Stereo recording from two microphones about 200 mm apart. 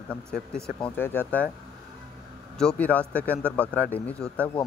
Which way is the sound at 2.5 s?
5° left (ahead or behind).